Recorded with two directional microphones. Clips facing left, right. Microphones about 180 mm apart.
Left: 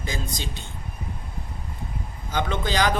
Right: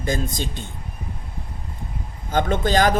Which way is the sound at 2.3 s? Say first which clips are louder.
Right 6 dB; 50° right (ahead or behind).